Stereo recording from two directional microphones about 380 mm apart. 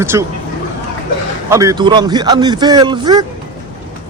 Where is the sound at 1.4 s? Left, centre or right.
Centre.